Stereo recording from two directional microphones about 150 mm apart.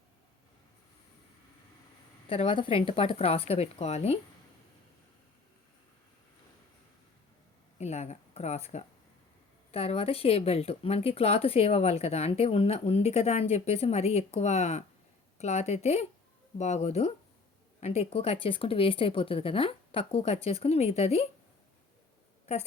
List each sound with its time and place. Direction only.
2.2 s speech: 40° left (ahead or behind)
7.8 s speech: 50° left (ahead or behind)